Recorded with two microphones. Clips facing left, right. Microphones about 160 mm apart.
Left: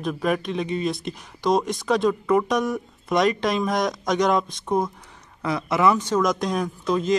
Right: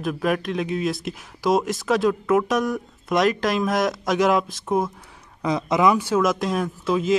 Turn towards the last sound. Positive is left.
turn(degrees=-5)  # may be behind; listen again after turning